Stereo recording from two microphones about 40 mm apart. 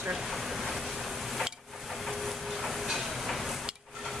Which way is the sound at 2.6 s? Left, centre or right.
Centre.